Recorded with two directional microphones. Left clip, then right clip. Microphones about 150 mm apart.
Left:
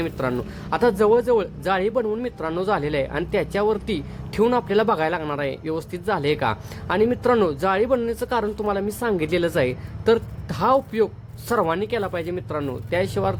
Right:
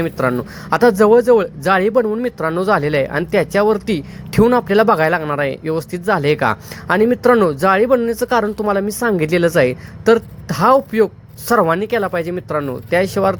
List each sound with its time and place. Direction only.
0.0 s speech: 35° right (ahead or behind)